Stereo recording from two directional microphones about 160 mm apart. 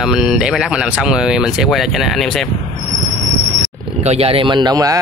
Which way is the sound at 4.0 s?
40° right (ahead or behind).